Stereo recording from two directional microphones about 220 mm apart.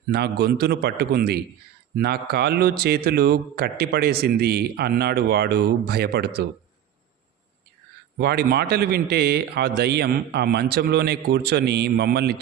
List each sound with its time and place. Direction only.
0.1 s speech: 45° right (ahead or behind)
8.2 s speech: 45° right (ahead or behind)